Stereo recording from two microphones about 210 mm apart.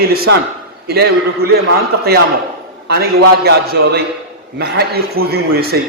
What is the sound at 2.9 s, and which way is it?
A man's voice, 50° right (ahead or behind).